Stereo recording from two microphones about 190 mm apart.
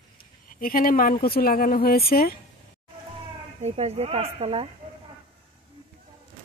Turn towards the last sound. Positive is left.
turn(degrees=-30)  # may be behind; listen again after turning